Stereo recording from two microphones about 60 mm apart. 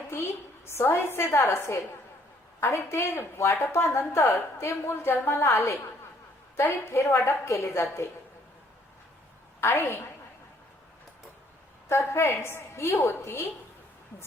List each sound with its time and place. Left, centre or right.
0.1 s a woman's voice: left
2.6 s a woman's voice: left
9.6 s a woman's voice: left
11.9 s a woman's voice: left